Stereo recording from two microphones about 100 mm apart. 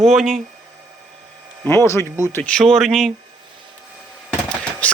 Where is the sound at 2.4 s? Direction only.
10° left (ahead or behind).